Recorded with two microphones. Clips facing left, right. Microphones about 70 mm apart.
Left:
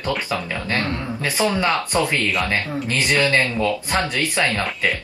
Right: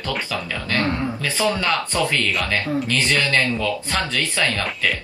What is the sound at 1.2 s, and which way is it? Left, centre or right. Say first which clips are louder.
Speech: left 2 dB; left.